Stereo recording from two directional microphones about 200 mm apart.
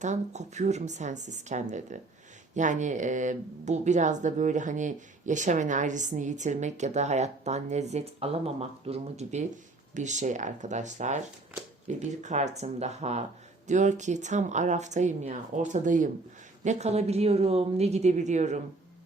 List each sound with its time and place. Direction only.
0.0 s speech: 35° right (ahead or behind)